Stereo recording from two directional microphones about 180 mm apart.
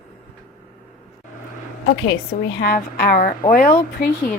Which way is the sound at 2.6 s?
55° left (ahead or behind).